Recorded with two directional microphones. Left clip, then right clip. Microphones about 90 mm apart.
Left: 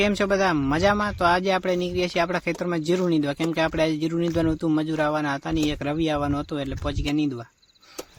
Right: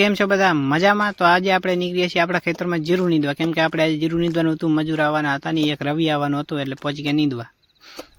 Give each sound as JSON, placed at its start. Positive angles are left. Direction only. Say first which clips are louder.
{"t": 0.0, "sound": "speech", "louder": "right 4 dB", "side_deg": -25}